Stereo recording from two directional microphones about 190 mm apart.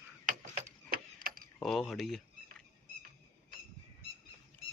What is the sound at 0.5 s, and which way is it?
Tick-tock, 50° right (ahead or behind).